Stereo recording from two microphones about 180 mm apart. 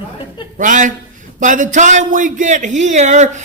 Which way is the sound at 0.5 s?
45° right (ahead or behind).